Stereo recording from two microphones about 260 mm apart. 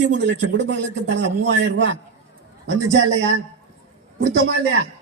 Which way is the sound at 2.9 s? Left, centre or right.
Right.